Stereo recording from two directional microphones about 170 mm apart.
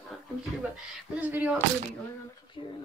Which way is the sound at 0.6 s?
5° right (ahead or behind).